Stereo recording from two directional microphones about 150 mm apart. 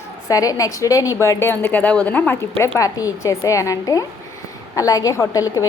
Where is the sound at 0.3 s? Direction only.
20° left (ahead or behind).